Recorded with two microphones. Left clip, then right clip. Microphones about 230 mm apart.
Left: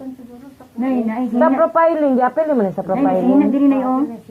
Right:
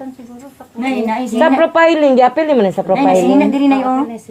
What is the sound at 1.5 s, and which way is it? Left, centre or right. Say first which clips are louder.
A woman's voice: right 5 dB; right.